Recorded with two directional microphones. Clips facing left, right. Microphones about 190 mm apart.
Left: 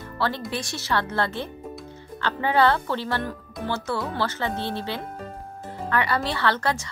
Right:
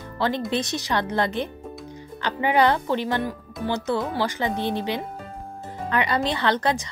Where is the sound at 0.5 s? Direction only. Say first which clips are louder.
Right 3 dB; 20° right (ahead or behind).